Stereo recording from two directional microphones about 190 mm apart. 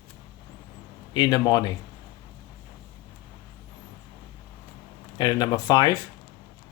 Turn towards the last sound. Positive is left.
turn(degrees=20)  # may be behind; listen again after turning